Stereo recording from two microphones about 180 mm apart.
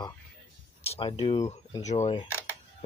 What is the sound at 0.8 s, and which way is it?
Speech, 30° left (ahead or behind).